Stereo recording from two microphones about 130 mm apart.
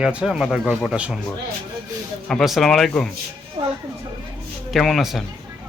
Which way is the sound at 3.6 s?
35° right (ahead or behind).